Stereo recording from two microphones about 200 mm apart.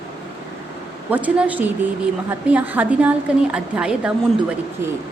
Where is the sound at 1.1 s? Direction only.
5° right (ahead or behind).